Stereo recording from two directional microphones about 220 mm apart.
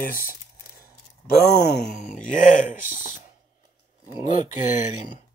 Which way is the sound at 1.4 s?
50° left (ahead or behind).